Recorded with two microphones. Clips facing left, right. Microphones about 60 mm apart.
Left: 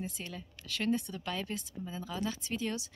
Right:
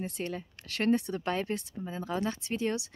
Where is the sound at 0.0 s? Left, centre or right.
Right.